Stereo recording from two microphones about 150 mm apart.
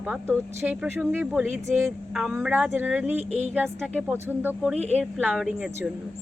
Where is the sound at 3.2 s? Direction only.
50° right (ahead or behind).